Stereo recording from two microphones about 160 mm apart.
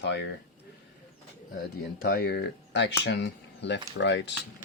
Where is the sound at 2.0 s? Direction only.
80° left.